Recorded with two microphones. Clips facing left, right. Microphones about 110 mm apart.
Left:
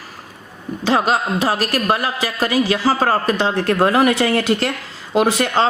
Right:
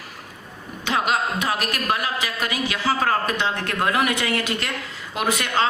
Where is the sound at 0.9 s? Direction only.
35° left (ahead or behind).